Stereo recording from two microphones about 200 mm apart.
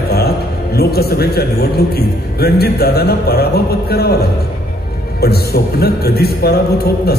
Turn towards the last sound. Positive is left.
turn(degrees=50)  # may be behind; listen again after turning